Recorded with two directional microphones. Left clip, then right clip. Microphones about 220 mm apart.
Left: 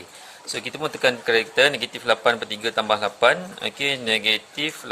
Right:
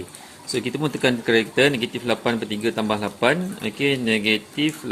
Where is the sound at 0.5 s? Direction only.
15° left (ahead or behind).